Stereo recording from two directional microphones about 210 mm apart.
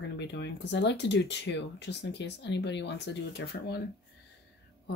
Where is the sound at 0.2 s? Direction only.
55° left (ahead or behind).